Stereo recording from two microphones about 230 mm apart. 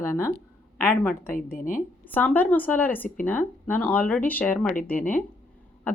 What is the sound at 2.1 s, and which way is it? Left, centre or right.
A woman's voice, centre.